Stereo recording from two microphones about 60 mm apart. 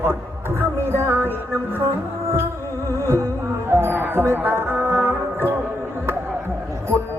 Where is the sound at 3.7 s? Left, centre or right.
Right.